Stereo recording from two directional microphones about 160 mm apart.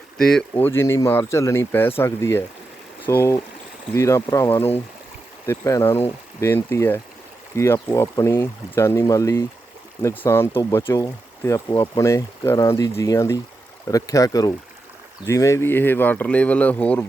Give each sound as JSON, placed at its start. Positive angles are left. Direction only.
{"t": 0.2, "sound": "speech", "side_deg": 5}